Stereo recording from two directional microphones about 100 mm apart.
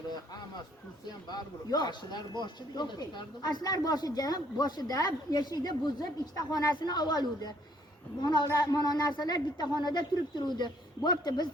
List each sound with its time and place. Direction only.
0.1 s speech: 45° left (ahead or behind)